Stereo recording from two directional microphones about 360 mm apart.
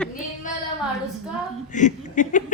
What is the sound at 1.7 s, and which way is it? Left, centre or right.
Speech, left.